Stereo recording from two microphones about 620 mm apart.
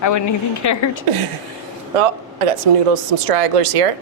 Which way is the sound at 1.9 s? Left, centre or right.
Right.